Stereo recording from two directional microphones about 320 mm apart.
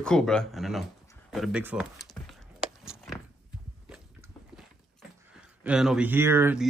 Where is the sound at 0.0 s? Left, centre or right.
Centre.